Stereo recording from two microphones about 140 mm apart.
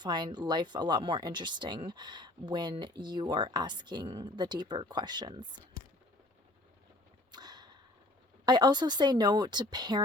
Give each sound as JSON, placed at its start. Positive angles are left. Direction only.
{"t": 0.0, "sound": "speech", "side_deg": -30}
{"t": 7.3, "sound": "whip", "side_deg": -30}
{"t": 8.4, "sound": "speech", "side_deg": -30}